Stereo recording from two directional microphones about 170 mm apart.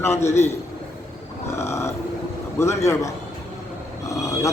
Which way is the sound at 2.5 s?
15° left (ahead or behind).